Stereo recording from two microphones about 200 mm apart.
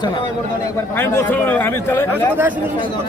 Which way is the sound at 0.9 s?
10° left (ahead or behind).